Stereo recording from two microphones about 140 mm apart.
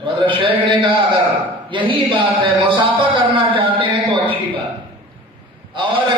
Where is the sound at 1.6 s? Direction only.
35° right (ahead or behind).